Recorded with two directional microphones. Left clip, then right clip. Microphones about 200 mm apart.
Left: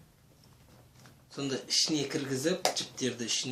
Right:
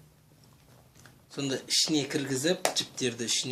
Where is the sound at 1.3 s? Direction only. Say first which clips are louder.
Right 2 dB; 40° right (ahead or behind).